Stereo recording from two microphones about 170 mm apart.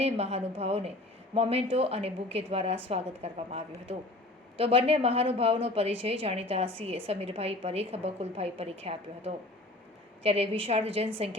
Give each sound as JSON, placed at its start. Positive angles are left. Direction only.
{"t": 0.0, "sound": "a woman's voice", "side_deg": -40}